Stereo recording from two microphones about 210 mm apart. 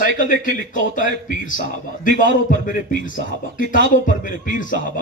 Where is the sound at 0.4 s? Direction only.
40° left (ahead or behind).